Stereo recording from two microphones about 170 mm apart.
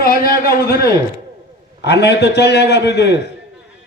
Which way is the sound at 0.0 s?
60° left (ahead or behind).